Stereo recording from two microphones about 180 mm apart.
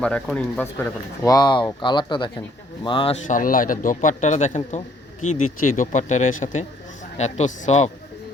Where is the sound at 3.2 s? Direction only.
50° left (ahead or behind).